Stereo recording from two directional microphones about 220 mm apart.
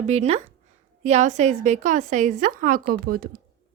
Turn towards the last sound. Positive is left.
turn(degrees=-40)  # may be behind; listen again after turning